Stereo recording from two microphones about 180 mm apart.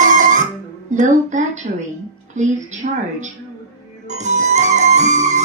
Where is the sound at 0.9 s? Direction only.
45° right (ahead or behind).